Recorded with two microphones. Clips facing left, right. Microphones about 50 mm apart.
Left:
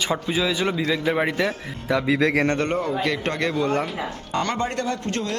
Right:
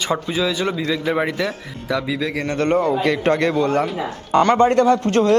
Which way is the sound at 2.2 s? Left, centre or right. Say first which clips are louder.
Left 3 dB; left.